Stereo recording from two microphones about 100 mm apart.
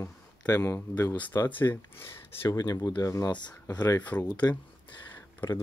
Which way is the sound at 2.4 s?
40° left (ahead or behind).